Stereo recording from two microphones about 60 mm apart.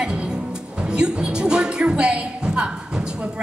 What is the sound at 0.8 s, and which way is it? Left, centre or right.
Music, centre.